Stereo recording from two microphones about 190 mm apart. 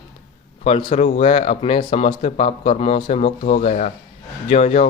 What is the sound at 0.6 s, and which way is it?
A man's voice, 30° left (ahead or behind).